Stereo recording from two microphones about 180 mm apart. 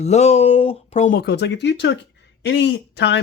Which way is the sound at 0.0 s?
40° left (ahead or behind).